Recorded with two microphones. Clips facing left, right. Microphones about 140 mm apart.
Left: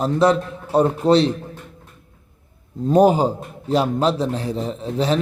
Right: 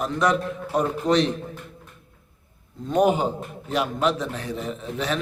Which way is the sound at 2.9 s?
35° left (ahead or behind).